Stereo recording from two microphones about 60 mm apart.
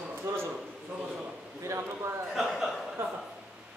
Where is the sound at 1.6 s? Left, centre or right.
Right.